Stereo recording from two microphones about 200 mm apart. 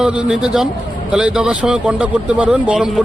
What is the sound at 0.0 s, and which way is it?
Speech, 5° right (ahead or behind).